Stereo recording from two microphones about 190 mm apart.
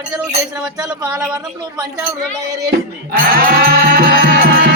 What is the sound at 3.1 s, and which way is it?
Music, 50° right (ahead or behind).